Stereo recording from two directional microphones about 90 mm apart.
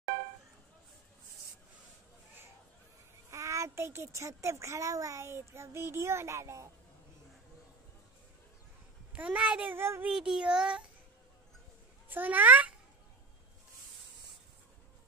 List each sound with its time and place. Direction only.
3.3 s a child's voice: 35° right (ahead or behind)
9.1 s a child's voice: 15° right (ahead or behind)
10.0 s a child's voice: 5° right (ahead or behind)
12.1 s a child's voice: 20° right (ahead or behind)